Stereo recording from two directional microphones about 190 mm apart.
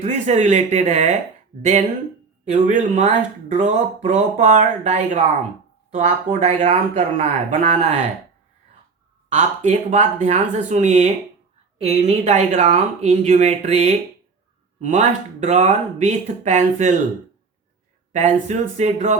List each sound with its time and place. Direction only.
0.0 s speech: 35° right (ahead or behind)
2.4 s speech: 40° right (ahead or behind)
9.3 s speech: 35° right (ahead or behind)
18.1 s speech: 40° right (ahead or behind)